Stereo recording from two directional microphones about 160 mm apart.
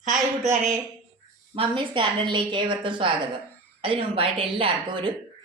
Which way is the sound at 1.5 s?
30° right (ahead or behind).